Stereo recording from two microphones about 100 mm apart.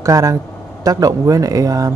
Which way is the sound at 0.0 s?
35° right (ahead or behind).